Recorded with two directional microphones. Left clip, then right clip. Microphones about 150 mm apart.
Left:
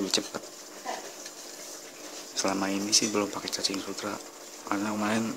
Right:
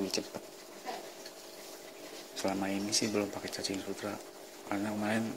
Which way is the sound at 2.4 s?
10° left (ahead or behind).